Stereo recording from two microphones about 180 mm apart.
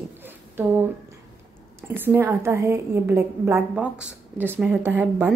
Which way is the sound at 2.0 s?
10° right (ahead or behind).